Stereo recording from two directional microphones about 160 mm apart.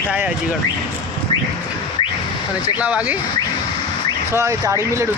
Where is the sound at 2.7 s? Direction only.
10° right (ahead or behind).